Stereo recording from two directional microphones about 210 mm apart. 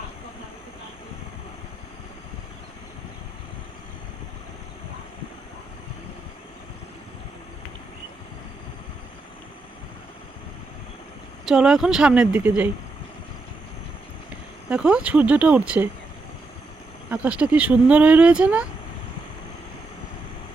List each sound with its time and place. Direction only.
11.4 s speech: 5° right (ahead or behind)
14.7 s speech: 5° right (ahead or behind)
17.1 s speech: 5° right (ahead or behind)